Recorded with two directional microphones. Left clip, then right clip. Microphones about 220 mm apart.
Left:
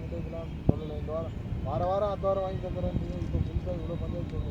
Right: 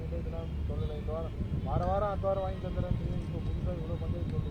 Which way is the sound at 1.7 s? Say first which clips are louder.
Left 3 dB; 45° left (ahead or behind).